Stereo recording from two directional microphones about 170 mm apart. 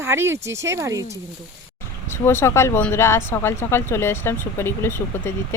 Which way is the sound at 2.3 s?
15° left (ahead or behind).